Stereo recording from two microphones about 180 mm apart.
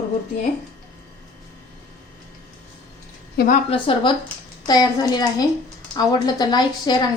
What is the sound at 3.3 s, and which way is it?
Speech, 45° left (ahead or behind).